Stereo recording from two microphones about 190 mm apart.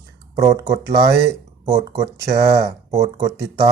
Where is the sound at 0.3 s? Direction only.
20° right (ahead or behind).